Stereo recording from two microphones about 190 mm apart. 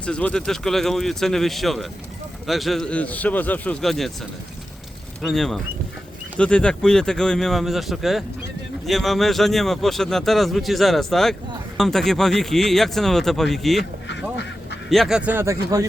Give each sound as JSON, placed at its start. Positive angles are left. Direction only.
{"t": 0.0, "sound": "a man's voice", "side_deg": 5}
{"t": 5.2, "sound": "speech", "side_deg": 0}
{"t": 14.8, "sound": "a man's voice", "side_deg": 0}